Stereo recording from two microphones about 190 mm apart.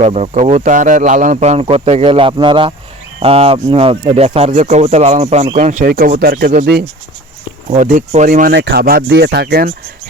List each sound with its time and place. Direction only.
0.0 s speech: 35° right (ahead or behind)
5.7 s speech: 50° right (ahead or behind)
7.7 s speech: 40° right (ahead or behind)